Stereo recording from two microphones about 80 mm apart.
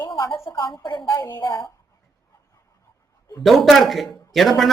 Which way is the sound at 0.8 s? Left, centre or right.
Left.